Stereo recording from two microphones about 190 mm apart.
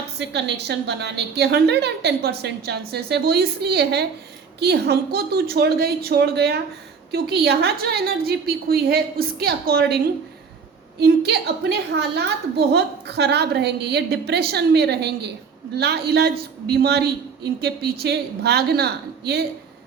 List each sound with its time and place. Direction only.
0.2 s a woman's voice: 65° right (ahead or behind)
11.0 s a woman's voice: 60° right (ahead or behind)